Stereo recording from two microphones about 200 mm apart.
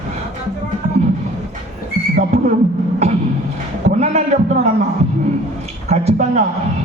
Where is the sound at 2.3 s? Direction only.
30° right (ahead or behind).